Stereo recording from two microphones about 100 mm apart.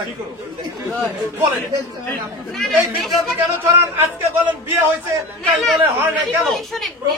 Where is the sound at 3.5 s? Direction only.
25° right (ahead or behind).